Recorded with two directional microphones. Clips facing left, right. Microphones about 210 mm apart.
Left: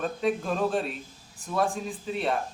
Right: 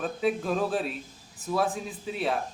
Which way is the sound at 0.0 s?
5° right (ahead or behind).